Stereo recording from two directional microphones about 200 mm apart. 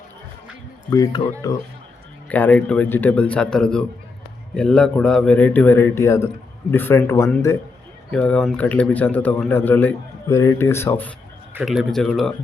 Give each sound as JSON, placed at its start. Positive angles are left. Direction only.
{"t": 0.9, "sound": "a man's voice", "side_deg": 15}
{"t": 11.5, "sound": "speech", "side_deg": 0}